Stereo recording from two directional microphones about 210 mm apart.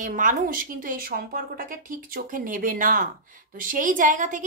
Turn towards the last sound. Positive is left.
turn(degrees=-35)  # may be behind; listen again after turning